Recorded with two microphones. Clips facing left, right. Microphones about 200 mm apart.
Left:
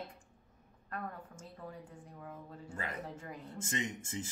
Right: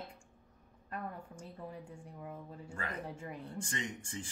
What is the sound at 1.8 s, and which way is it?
Speech, 10° right (ahead or behind).